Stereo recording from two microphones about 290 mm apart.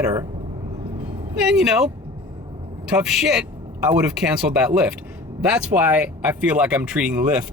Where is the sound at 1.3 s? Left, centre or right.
Centre.